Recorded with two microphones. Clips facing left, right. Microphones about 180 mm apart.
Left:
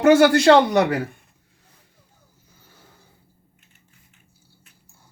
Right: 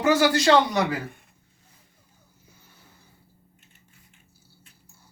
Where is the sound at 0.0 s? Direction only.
60° left (ahead or behind).